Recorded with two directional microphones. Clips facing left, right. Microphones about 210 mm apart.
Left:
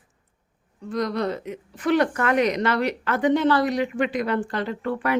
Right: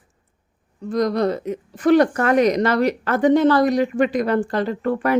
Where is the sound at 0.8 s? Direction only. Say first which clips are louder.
Right 6 dB; 40° right (ahead or behind).